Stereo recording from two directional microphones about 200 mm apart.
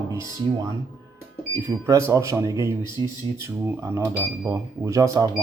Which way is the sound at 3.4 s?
15° right (ahead or behind).